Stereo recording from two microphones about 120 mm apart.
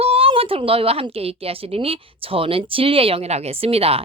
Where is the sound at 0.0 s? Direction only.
55° right (ahead or behind).